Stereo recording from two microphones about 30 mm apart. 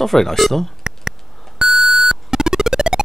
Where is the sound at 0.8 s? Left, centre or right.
Centre.